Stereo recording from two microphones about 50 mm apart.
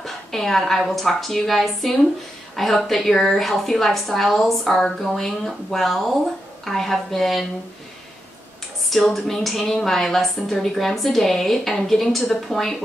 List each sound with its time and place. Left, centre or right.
0.0 s a woman's voice: centre
8.9 s a woman's voice: centre